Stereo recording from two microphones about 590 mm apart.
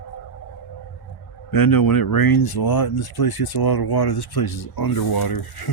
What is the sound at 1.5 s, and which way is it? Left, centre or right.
Speech, left.